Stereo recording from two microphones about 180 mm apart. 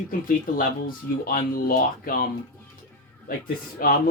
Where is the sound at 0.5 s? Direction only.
50° left (ahead or behind).